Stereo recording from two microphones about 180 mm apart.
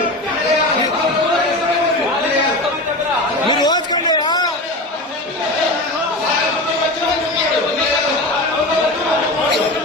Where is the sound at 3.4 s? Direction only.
20° left (ahead or behind).